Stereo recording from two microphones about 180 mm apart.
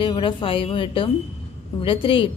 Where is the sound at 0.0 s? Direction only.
30° left (ahead or behind).